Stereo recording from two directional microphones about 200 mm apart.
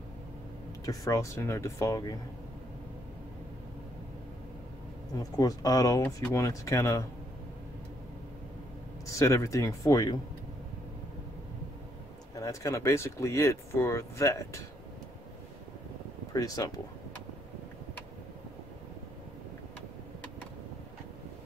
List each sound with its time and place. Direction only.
0.8 s speech: 15° left (ahead or behind)
5.1 s speech: 20° left (ahead or behind)
9.0 s speech: 15° left (ahead or behind)
12.4 s speech: 15° left (ahead or behind)
16.3 s speech: 15° left (ahead or behind)